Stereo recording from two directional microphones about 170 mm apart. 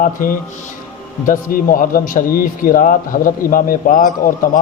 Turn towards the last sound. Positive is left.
turn(degrees=55)  # may be behind; listen again after turning